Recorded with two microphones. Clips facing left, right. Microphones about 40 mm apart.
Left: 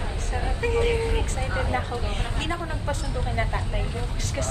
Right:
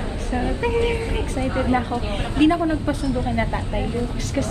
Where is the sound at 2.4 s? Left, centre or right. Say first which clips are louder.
Right 15 dB; right.